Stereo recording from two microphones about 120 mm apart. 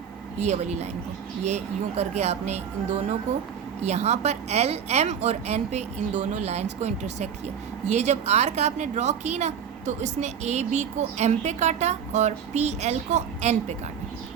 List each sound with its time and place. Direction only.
0.3 s a woman's voice: 65° right (ahead or behind)
3.8 s a woman's voice: 65° right (ahead or behind)